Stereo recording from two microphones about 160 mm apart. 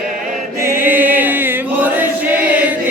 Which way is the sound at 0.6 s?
15° right (ahead or behind).